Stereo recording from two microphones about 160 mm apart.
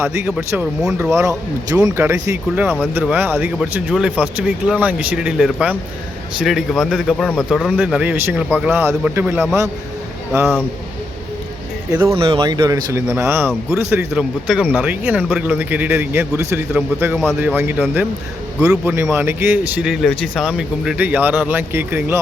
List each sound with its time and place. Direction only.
0.0 s speech: 15° right (ahead or behind)
1.1 s speech: 20° right (ahead or behind)
11.9 s speech: 10° right (ahead or behind)
12.1 s speech: 35° right (ahead or behind); by 14.1 s 15° right (ahead or behind)
14.1 s speech: 5° right (ahead or behind)